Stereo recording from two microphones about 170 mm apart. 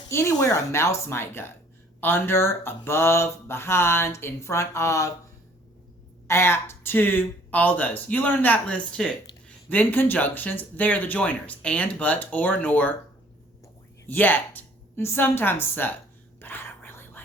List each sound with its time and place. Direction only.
0.1 s speech: 15° left (ahead or behind)
6.2 s speech: 15° left (ahead or behind)
14.1 s a woman's voice: 10° left (ahead or behind)
16.4 s whispering: 10° left (ahead or behind)